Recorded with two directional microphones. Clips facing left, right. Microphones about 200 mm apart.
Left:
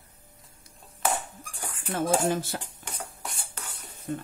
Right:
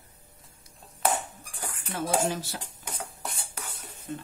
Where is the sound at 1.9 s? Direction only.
50° left (ahead or behind).